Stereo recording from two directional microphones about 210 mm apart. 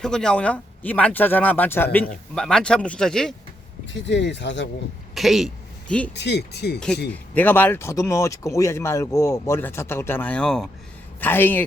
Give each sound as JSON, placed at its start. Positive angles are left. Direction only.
{"t": 0.0, "sound": "a man's voice", "side_deg": 5}
{"t": 3.8, "sound": "speech", "side_deg": 60}
{"t": 5.1, "sound": "speech", "side_deg": 0}
{"t": 6.1, "sound": "speech", "side_deg": 55}
{"t": 6.7, "sound": "a man's voice", "side_deg": 5}